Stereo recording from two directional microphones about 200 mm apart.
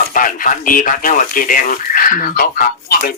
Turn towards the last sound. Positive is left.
turn(degrees=45)  # may be behind; listen again after turning